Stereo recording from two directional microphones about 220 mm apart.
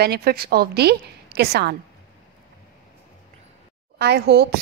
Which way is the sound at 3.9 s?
45° right (ahead or behind).